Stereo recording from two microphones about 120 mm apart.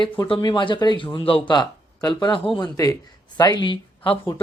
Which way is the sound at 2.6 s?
30° left (ahead or behind).